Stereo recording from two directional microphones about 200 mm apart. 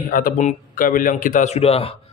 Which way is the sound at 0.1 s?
45° left (ahead or behind).